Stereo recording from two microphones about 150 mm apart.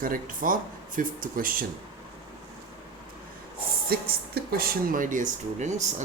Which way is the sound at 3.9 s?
90° right.